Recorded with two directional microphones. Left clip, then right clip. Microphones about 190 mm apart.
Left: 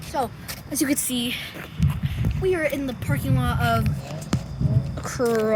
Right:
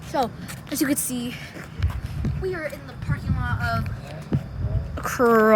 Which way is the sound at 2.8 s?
65° left (ahead or behind).